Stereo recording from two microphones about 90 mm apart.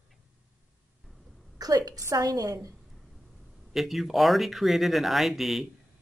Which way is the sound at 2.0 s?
40° right (ahead or behind).